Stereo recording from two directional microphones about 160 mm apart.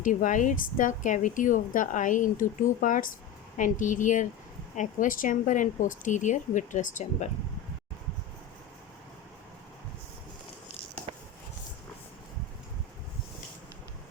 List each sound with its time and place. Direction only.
0.0 s speech: 55° left (ahead or behind)